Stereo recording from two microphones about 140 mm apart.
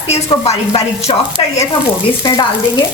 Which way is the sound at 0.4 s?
45° left (ahead or behind).